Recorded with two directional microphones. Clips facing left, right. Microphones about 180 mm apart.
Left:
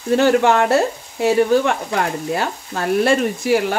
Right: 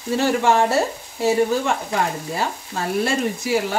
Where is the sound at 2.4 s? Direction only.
60° left (ahead or behind).